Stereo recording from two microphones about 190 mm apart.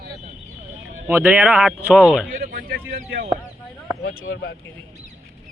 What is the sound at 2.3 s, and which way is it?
Speech, 45° right (ahead or behind).